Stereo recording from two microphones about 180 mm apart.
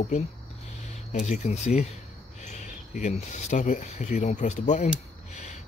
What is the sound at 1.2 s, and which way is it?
Speech, 40° left (ahead or behind).